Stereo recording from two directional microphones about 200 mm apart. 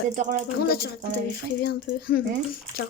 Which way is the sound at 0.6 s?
50° left (ahead or behind).